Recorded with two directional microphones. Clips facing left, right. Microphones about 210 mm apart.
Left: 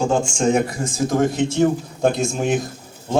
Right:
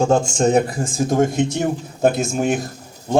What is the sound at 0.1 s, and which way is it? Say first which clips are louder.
Speech: right 3 dB; 40° right (ahead or behind).